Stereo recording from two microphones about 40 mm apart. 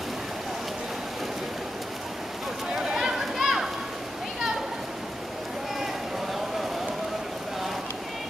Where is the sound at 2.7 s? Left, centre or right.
Centre.